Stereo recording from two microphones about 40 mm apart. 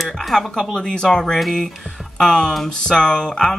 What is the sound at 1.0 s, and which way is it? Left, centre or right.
Speech, centre.